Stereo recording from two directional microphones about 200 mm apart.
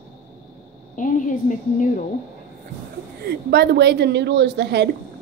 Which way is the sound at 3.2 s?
55° right (ahead or behind).